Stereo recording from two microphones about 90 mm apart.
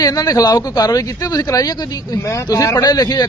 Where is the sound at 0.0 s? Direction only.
45° left (ahead or behind).